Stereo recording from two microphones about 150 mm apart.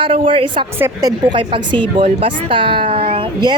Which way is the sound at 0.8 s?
25° right (ahead or behind).